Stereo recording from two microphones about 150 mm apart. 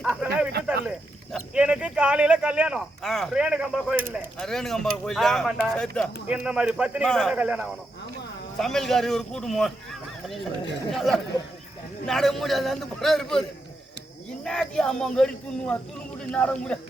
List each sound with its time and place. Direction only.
0.0 s a sound: 5° right (ahead or behind)
0.9 s speech: 5° right (ahead or behind)
4.0 s speech: 15° right (ahead or behind)
4.4 s speech: 5° left (ahead or behind)
6.2 s speech: 5° right (ahead or behind)
7.1 s speech: 5° left (ahead or behind)
7.3 s speech: 10° right (ahead or behind)
8.5 s speech: 5° left (ahead or behind)
14.4 s speech: 5° left (ahead or behind)